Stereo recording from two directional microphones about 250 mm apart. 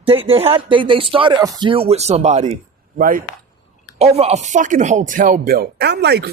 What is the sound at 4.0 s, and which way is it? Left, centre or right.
Speech, right.